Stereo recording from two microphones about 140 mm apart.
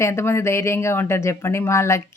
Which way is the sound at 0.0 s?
20° left (ahead or behind).